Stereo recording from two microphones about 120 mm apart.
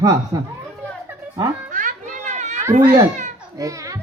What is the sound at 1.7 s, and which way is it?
Children playing, 90° right.